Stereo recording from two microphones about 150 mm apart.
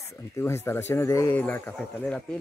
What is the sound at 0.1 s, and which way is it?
Speech, 15° left (ahead or behind).